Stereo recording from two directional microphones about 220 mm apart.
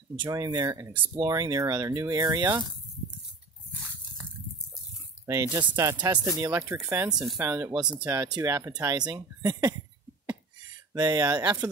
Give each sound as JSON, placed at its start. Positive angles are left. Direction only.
{"t": 0.2, "sound": "speech", "side_deg": -15}
{"t": 5.2, "sound": "speech", "side_deg": -15}
{"t": 10.9, "sound": "speech", "side_deg": -15}